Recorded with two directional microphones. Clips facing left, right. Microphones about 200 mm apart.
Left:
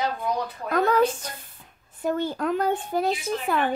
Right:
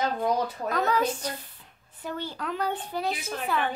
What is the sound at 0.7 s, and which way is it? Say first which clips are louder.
Speech: left 6 dB; 50° left (ahead or behind).